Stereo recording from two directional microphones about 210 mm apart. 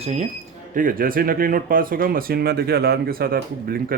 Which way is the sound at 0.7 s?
40° right (ahead or behind).